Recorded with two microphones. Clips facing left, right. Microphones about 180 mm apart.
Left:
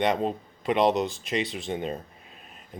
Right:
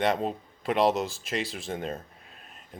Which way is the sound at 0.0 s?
Centre (ahead or behind).